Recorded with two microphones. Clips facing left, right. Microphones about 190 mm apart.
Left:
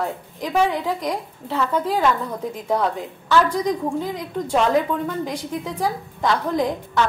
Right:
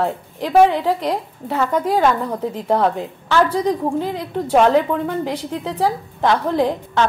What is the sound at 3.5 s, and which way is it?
A woman's voice, 70° right (ahead or behind).